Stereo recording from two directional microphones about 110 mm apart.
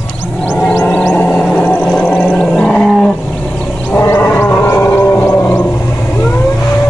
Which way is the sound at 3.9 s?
20° left (ahead or behind).